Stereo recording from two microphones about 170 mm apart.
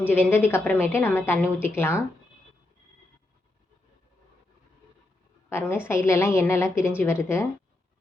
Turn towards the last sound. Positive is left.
turn(degrees=15)  # may be behind; listen again after turning